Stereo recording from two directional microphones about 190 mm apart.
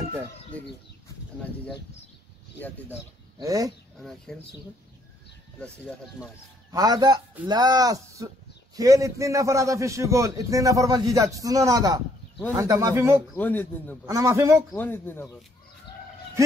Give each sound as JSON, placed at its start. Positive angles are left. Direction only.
{"t": 0.5, "sound": "speech", "side_deg": 5}
{"t": 3.3, "sound": "speech", "side_deg": -20}
{"t": 4.3, "sound": "speech", "side_deg": 0}
{"t": 6.7, "sound": "a man's voice", "side_deg": -20}
{"t": 13.4, "sound": "speech", "side_deg": 10}
{"t": 14.0, "sound": "a man's voice", "side_deg": -15}
{"t": 14.7, "sound": "speech", "side_deg": 10}